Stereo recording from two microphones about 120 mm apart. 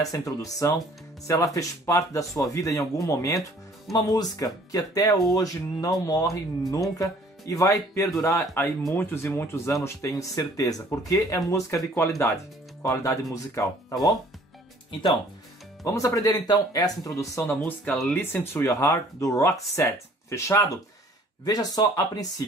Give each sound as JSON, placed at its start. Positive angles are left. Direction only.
{"t": 0.0, "sound": "speech", "side_deg": 30}
{"t": 15.8, "sound": "speech", "side_deg": 25}
{"t": 17.4, "sound": "speech", "side_deg": 15}